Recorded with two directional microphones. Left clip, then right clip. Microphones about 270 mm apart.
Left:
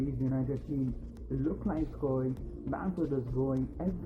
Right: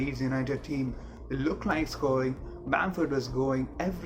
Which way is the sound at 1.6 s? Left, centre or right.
Right.